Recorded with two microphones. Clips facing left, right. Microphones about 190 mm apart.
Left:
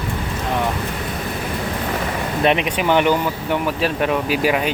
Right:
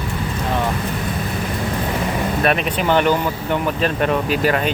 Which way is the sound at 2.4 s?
20° left (ahead or behind).